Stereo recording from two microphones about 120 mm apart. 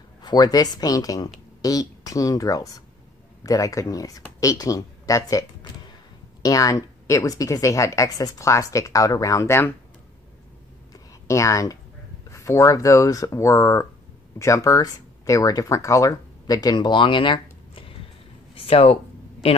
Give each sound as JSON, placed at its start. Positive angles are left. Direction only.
{"t": 0.2, "sound": "speech", "side_deg": 35}
{"t": 6.4, "sound": "speech", "side_deg": 30}
{"t": 10.9, "sound": "a sound", "side_deg": 25}
{"t": 12.3, "sound": "speech", "side_deg": 25}